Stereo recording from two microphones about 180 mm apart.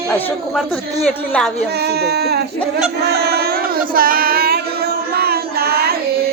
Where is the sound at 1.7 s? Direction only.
65° right (ahead or behind).